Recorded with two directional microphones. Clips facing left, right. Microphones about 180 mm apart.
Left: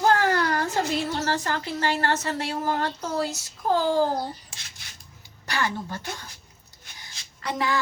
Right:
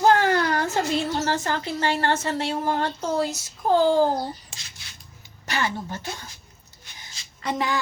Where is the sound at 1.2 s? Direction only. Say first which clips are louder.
Right 2 dB; 20° right (ahead or behind).